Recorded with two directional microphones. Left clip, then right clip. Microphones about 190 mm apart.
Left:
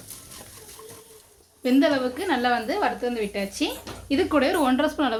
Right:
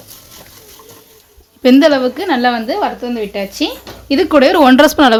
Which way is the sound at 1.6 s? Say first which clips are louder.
Right 12 dB; 50° right (ahead or behind).